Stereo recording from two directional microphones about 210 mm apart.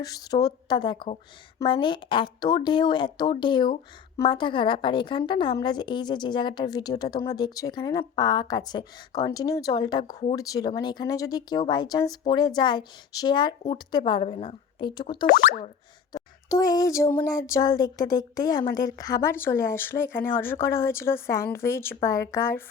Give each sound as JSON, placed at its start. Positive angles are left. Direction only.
{"t": 0.0, "sound": "speech", "side_deg": 15}